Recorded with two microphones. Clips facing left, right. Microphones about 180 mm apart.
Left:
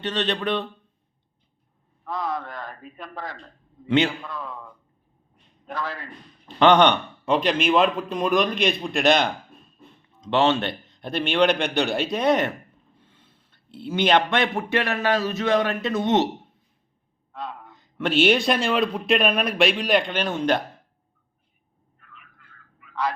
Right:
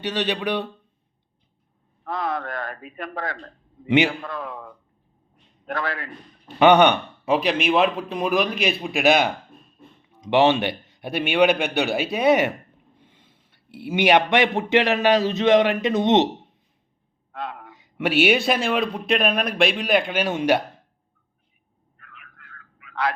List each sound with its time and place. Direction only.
0.0 s a man's voice: 10° right (ahead or behind)
2.4 s speech: 65° right (ahead or behind)
3.8 s a man's voice: 15° right (ahead or behind)
5.6 s speech: 65° right (ahead or behind)
6.6 s a man's voice: 10° right (ahead or behind)
17.4 s a sound: 75° right (ahead or behind)
17.9 s speech: 10° right (ahead or behind)
21.9 s a sound: 80° right